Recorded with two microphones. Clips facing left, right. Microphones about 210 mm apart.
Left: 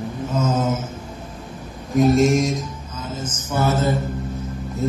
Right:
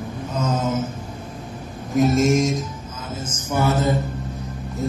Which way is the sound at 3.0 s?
10° right (ahead or behind).